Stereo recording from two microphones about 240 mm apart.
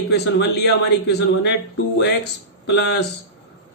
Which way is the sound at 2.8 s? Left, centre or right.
Left.